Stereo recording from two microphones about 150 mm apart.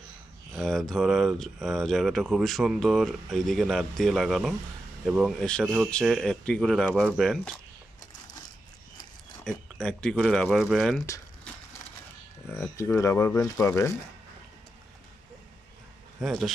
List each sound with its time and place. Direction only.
0.6 s speech: centre (ahead or behind)
9.4 s speech: 5° left (ahead or behind)
11.5 s crushing: 10° left (ahead or behind)
12.7 s speech: 20° left (ahead or behind)
16.2 s speech: centre (ahead or behind)